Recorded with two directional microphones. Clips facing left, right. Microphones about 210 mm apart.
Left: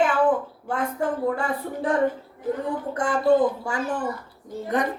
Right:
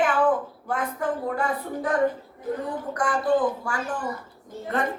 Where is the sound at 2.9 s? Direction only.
25° left (ahead or behind).